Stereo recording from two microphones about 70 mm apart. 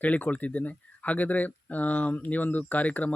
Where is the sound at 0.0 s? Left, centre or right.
Left.